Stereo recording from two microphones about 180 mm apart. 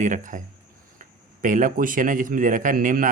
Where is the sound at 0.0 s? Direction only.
45° right (ahead or behind).